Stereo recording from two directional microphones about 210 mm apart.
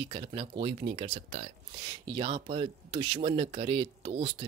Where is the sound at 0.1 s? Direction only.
25° right (ahead or behind).